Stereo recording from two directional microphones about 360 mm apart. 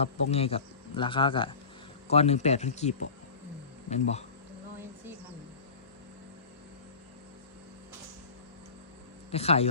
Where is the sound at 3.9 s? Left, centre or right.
Centre.